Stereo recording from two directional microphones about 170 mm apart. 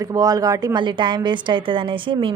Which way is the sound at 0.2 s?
20° right (ahead or behind).